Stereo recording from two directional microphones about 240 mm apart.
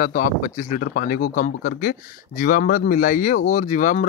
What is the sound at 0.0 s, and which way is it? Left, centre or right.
Speech, left.